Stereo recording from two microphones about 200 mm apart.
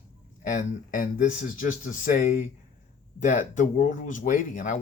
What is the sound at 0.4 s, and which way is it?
Speech, 40° left (ahead or behind).